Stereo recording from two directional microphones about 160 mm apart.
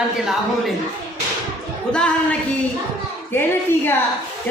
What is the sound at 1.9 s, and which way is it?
Speech, 5° left (ahead or behind).